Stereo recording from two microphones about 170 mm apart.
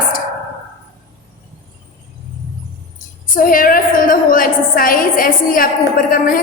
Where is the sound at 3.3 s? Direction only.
55° left (ahead or behind).